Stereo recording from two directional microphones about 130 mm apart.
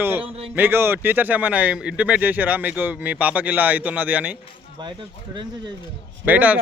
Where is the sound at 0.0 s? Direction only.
15° right (ahead or behind).